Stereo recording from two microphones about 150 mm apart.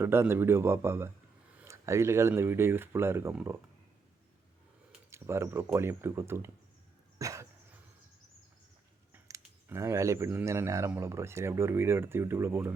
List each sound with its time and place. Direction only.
0.0 s speech: 15° right (ahead or behind)
5.1 s speech: 15° right (ahead or behind)
7.2 s dog: 20° right (ahead or behind)
9.1 s speech: 20° right (ahead or behind)